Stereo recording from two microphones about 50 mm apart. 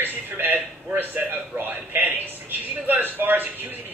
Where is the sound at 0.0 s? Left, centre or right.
Right.